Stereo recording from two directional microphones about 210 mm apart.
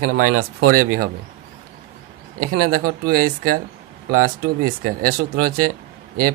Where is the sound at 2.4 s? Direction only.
45° right (ahead or behind).